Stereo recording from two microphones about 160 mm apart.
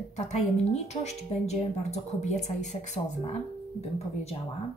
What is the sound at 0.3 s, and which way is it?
Speech, 45° left (ahead or behind).